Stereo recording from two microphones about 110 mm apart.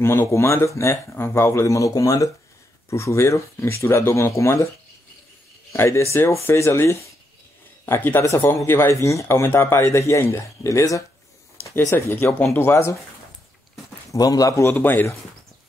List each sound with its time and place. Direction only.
0.0 s speech: 20° left (ahead or behind)
5.7 s speech: 25° left (ahead or behind)
14.1 s speech: 35° left (ahead or behind)
14.7 s speech: 15° left (ahead or behind)